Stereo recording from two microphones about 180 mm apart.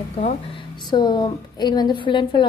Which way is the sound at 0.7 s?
25° left (ahead or behind).